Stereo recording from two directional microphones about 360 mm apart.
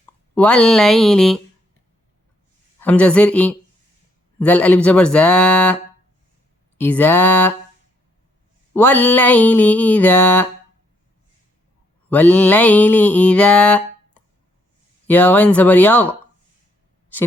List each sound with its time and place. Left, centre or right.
0.3 s mantra: centre
2.8 s mantra: centre
6.7 s mantra: centre
8.7 s mantra: centre
12.0 s mantra: centre